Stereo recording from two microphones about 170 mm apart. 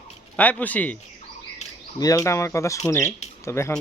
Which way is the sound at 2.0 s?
20° left (ahead or behind).